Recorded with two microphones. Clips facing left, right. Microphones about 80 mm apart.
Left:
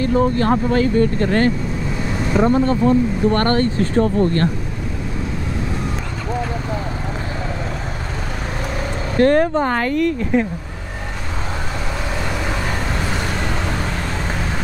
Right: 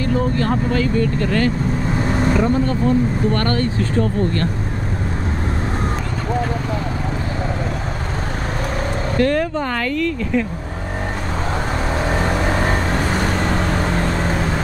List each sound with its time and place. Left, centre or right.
0.0 s speech: left
9.1 s speech: left
12.0 s vehicle: right